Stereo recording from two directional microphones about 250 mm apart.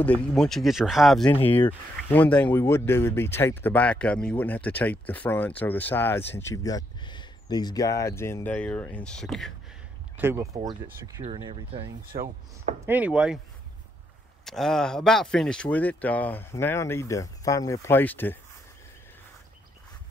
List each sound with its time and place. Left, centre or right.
0.0 s speech: centre
1.2 s speech: left
1.6 s speech: centre
10.1 s speech: centre
12.8 s speech: centre
14.4 s speech: centre